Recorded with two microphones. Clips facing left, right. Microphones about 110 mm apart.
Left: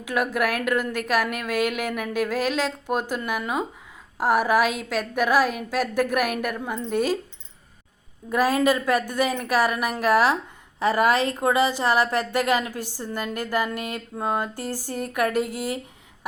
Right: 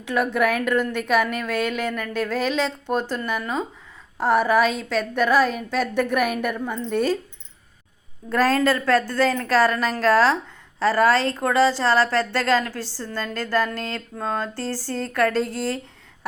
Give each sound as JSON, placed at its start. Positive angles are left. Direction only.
{"t": 0.0, "sound": "a woman's voice", "side_deg": 5}
{"t": 8.3, "sound": "a woman's voice", "side_deg": 10}